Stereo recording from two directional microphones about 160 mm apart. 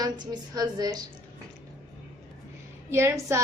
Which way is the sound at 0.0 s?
25° right (ahead or behind).